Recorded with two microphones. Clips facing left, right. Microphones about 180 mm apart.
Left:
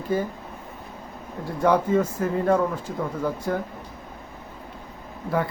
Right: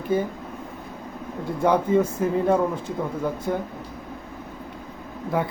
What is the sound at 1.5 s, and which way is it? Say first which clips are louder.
A man's voice: even; 20° right (ahead or behind).